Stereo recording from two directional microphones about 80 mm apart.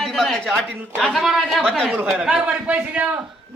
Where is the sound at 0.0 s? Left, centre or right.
Centre.